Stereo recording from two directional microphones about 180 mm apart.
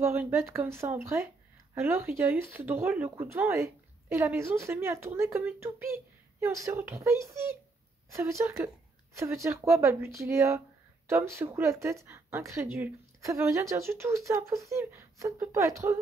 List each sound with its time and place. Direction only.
0.0 s speech: 15° right (ahead or behind)